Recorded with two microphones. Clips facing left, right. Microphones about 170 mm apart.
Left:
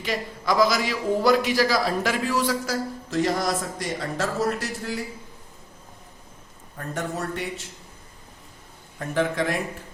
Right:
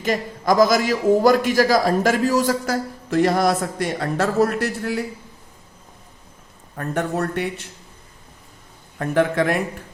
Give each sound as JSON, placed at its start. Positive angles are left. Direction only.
{"t": 0.0, "sound": "a man's voice", "side_deg": -45}
{"t": 6.7, "sound": "speech", "side_deg": -60}
{"t": 9.0, "sound": "speech", "side_deg": -60}